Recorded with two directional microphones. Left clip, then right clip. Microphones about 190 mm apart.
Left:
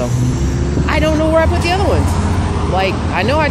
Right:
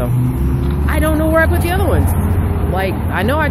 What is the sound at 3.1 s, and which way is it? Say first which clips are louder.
Speech: left 1 dB; 5° right (ahead or behind).